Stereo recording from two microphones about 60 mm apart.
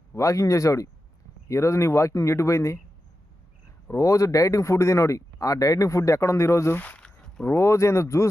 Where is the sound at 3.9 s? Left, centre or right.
Left.